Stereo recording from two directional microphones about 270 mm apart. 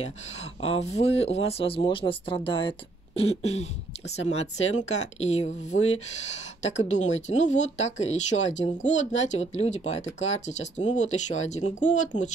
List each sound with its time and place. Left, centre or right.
0.7 s speech: left